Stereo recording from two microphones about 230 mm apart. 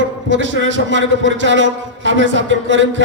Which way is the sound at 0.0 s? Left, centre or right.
Right.